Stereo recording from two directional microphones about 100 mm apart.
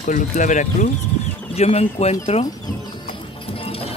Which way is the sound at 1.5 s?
90° left.